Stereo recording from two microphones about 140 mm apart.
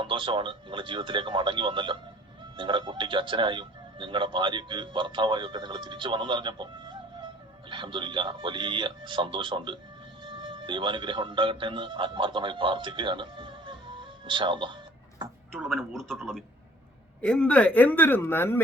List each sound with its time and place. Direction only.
0.0 s a man's voice: 35° right (ahead or behind)
7.7 s a man's voice: 35° right (ahead or behind)
15.5 s speech: centre (ahead or behind)